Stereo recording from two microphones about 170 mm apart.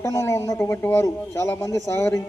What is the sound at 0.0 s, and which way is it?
A man's voice, 20° left (ahead or behind).